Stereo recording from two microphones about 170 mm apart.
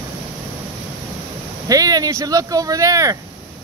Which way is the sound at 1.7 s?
20° right (ahead or behind).